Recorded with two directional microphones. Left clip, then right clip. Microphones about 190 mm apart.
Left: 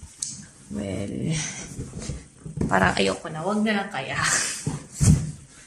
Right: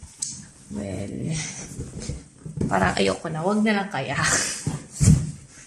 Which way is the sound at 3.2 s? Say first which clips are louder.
Right 2 dB; 25° right (ahead or behind).